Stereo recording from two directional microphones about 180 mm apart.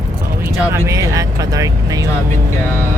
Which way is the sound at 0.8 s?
20° right (ahead or behind).